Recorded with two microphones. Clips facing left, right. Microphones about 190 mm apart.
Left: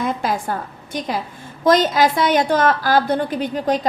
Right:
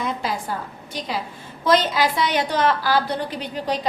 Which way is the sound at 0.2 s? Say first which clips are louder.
Left 4 dB; 50° left (ahead or behind).